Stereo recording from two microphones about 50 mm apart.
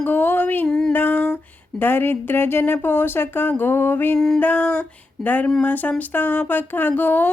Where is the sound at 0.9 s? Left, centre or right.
Left.